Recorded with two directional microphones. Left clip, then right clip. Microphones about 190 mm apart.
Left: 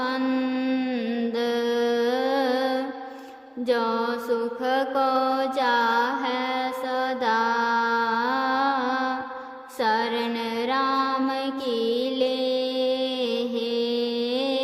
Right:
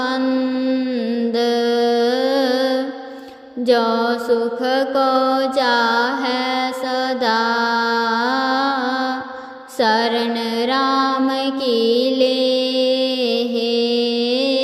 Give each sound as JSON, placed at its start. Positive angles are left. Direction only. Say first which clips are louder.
{"t": 0.2, "sound": "mantra", "louder": "right 6 dB", "side_deg": -5}
{"t": 1.4, "sound": "music", "louder": "right 7 dB", "side_deg": -15}
{"t": 3.7, "sound": "mantra", "louder": "right 8 dB", "side_deg": -20}
{"t": 9.7, "sound": "music", "louder": "right 7 dB", "side_deg": -20}